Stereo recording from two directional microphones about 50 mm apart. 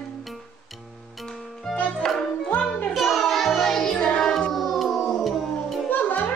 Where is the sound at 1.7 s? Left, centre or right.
Centre.